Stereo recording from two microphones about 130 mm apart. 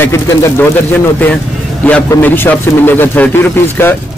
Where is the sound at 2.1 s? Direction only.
15° left (ahead or behind).